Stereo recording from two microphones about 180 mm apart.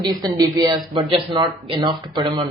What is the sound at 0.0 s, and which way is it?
Speech, 20° right (ahead or behind).